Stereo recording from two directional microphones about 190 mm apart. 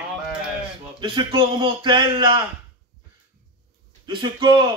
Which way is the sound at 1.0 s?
25° right (ahead or behind).